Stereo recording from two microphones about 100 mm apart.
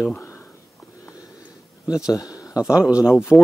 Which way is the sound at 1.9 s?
35° left (ahead or behind).